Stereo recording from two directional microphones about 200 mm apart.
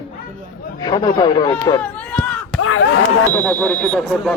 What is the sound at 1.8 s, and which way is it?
Run, 5° left (ahead or behind).